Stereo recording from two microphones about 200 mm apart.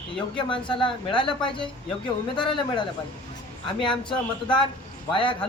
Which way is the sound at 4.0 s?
25° left (ahead or behind).